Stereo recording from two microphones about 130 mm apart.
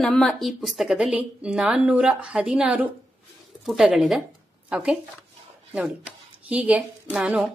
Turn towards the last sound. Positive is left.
turn(degrees=-5)  # may be behind; listen again after turning